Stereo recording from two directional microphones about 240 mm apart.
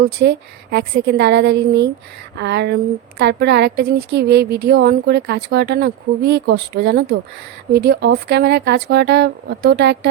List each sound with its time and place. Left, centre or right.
0.0 s a woman's voice: right